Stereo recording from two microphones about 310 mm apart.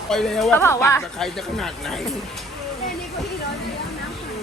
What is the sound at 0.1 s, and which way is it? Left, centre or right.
Speech, centre.